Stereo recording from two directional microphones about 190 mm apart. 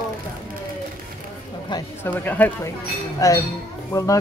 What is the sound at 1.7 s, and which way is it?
Speech, 20° left (ahead or behind).